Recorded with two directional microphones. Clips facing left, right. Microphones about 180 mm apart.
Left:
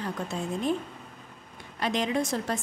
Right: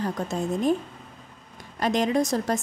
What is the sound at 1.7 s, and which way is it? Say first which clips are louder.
Speech: right 5 dB; 45° right (ahead or behind).